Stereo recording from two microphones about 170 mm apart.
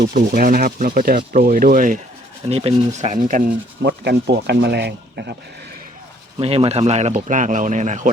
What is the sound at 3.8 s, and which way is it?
Rub, 80° right.